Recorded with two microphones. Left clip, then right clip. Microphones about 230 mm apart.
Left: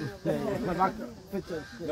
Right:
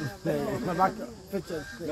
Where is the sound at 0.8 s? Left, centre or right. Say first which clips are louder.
Right 2 dB; right.